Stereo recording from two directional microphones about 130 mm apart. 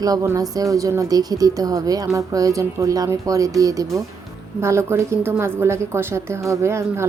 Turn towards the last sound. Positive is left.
turn(degrees=-20)  # may be behind; listen again after turning